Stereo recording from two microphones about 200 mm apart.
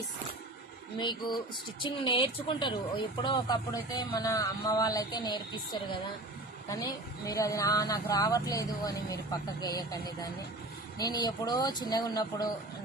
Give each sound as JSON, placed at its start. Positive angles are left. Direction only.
{"t": 0.9, "sound": "speech", "side_deg": 20}